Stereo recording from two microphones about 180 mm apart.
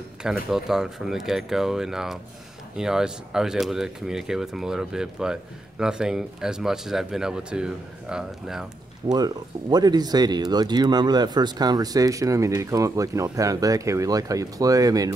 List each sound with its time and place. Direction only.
0.2 s speech: 5° right (ahead or behind)
9.1 s speech: 20° right (ahead or behind)